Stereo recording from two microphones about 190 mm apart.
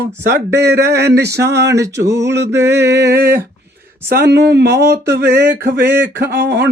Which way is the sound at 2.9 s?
55° right (ahead or behind).